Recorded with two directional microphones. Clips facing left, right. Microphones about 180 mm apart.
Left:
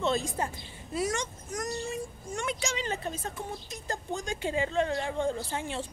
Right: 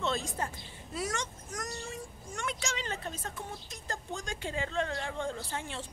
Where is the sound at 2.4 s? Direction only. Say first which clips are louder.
Left 3 dB; 10° left (ahead or behind).